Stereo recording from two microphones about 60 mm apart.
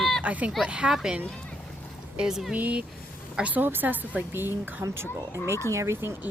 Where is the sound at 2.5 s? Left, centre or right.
Right.